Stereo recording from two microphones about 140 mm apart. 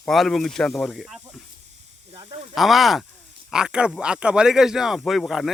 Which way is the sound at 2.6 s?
Centre (ahead or behind).